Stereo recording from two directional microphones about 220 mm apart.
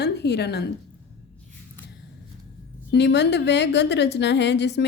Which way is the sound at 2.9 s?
50° left (ahead or behind).